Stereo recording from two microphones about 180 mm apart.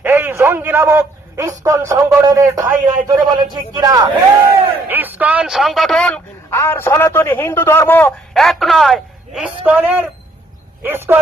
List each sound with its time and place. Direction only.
0.0 s a man's voice: 10° right (ahead or behind)
4.9 s a man's voice: 10° right (ahead or behind)